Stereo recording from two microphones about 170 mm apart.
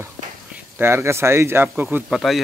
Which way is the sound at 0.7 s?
15° right (ahead or behind).